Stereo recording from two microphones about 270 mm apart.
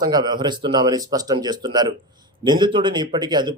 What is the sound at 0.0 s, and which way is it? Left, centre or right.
A man's voice, centre.